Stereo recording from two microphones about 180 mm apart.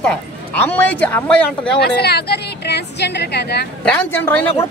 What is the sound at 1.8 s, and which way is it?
A woman's voice, 65° left (ahead or behind).